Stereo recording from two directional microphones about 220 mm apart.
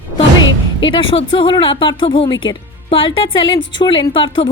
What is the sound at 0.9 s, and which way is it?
Speech, 25° left (ahead or behind).